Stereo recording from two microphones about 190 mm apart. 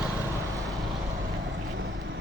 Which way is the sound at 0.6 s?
Centre (ahead or behind).